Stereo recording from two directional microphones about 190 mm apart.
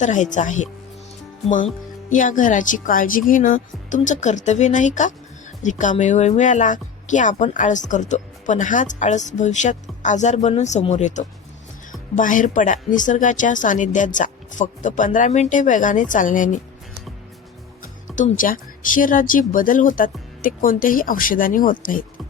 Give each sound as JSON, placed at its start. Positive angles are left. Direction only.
{"t": 0.0, "sound": "speech", "side_deg": 40}
{"t": 2.0, "sound": "speech", "side_deg": 45}
{"t": 18.1, "sound": "speech", "side_deg": 40}